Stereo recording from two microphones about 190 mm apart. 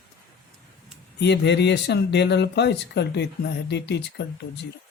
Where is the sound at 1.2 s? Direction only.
65° left (ahead or behind).